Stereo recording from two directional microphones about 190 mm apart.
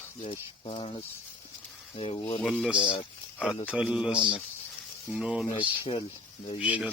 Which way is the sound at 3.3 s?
5° left (ahead or behind).